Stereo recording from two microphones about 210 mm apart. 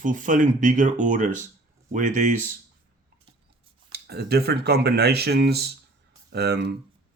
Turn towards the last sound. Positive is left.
turn(degrees=-50)  # may be behind; listen again after turning